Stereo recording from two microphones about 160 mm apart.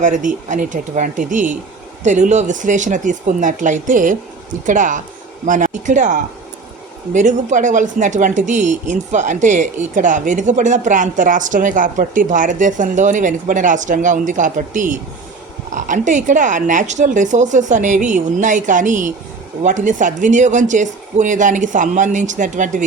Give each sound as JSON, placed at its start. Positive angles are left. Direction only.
{"t": 0.0, "sound": "a woman's voice", "side_deg": -55}